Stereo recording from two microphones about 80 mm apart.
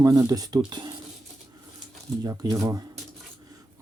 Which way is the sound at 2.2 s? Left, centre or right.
Right.